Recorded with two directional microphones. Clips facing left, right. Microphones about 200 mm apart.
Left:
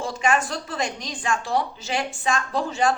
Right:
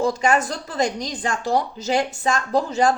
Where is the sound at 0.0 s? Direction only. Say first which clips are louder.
Right 4 dB; 35° right (ahead or behind).